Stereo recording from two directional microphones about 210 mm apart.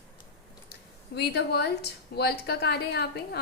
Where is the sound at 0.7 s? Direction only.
50° left (ahead or behind).